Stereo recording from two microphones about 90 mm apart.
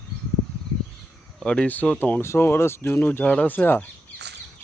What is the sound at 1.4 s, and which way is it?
Speech, 10° left (ahead or behind).